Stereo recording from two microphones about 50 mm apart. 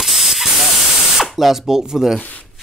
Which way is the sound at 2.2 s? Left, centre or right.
Left.